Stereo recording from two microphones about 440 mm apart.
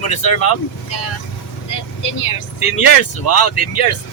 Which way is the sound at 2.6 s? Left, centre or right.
Left.